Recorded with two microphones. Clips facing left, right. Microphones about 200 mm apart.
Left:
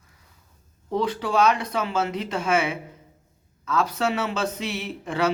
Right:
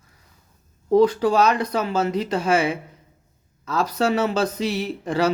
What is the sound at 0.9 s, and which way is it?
Speech, 40° right (ahead or behind).